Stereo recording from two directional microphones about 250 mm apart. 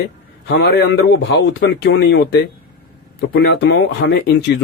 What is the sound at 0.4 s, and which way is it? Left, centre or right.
Speech, left.